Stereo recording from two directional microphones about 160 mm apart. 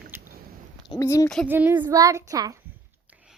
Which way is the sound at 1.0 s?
15° left (ahead or behind).